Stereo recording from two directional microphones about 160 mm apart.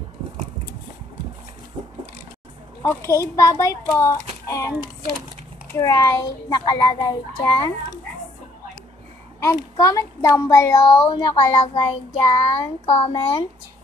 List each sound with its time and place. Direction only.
2.8 s a child's voice: 15° left (ahead or behind)
9.4 s a child's voice: 20° left (ahead or behind)
11.1 s child singing: 30° left (ahead or behind)